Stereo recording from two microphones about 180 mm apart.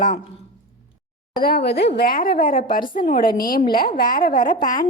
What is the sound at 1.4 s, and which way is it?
Speech, 55° left (ahead or behind).